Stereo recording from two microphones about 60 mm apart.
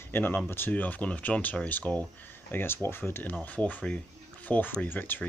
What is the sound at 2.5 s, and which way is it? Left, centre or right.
Speech, left.